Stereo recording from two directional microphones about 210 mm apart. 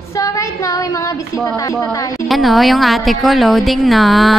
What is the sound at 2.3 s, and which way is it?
A woman's voice, centre (ahead or behind).